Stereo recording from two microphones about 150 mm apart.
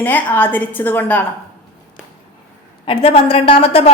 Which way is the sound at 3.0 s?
40° left (ahead or behind).